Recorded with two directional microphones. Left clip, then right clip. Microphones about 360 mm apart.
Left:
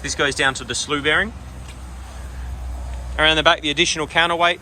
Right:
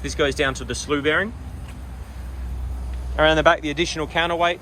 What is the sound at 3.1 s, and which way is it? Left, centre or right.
Speech, centre.